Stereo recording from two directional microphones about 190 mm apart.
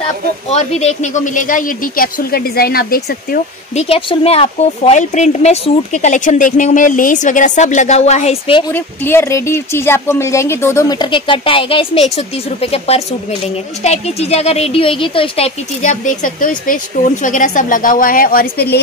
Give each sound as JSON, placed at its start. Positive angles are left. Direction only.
{"t": 0.5, "sound": "speech", "side_deg": 35}
{"t": 3.7, "sound": "speech", "side_deg": 30}
{"t": 8.7, "sound": "speech", "side_deg": 10}